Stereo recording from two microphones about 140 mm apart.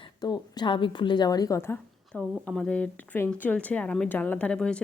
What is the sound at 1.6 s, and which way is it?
Speech, 15° left (ahead or behind).